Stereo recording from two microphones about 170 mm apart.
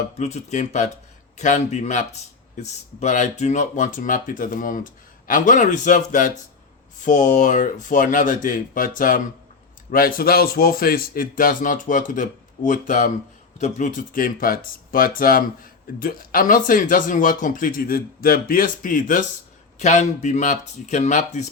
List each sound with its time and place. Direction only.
0.2 s speech: 40° left (ahead or behind)